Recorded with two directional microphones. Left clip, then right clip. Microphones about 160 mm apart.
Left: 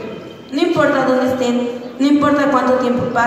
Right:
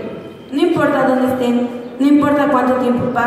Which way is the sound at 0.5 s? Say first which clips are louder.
Even; 30° left (ahead or behind).